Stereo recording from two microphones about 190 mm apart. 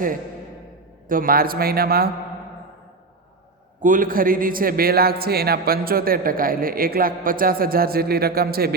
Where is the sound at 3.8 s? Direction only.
45° right (ahead or behind).